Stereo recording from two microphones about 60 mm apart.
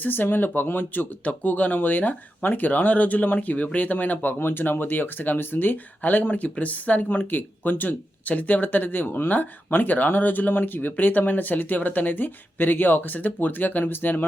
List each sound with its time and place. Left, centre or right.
0.0 s speech: left